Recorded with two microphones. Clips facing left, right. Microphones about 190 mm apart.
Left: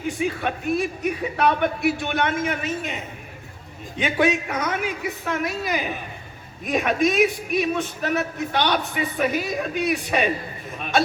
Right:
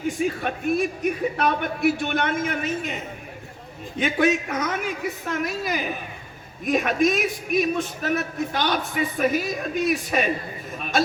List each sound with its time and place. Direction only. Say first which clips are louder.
0.4 s a man's voice: even; 50° right (ahead or behind)